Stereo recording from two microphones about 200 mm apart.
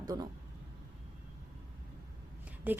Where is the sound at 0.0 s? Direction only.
20° right (ahead or behind).